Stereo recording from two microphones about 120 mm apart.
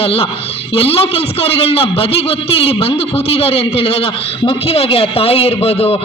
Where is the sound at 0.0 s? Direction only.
55° left (ahead or behind).